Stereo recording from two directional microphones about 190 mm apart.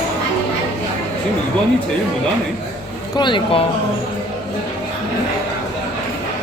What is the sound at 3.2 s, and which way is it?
Speech, 25° left (ahead or behind).